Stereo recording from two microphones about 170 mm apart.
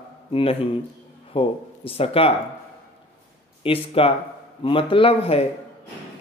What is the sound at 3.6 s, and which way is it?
A man's voice, 35° left (ahead or behind).